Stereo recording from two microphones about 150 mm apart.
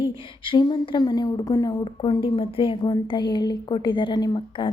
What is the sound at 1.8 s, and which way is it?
Speech, 35° left (ahead or behind).